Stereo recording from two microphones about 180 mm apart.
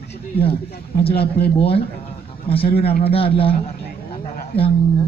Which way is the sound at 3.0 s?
30° left (ahead or behind).